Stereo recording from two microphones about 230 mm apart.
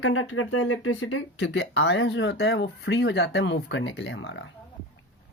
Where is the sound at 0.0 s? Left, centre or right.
Left.